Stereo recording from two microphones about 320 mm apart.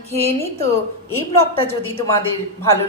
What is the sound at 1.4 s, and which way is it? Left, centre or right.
Speech, centre.